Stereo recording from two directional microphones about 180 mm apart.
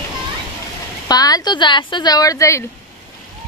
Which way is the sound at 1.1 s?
20° left (ahead or behind).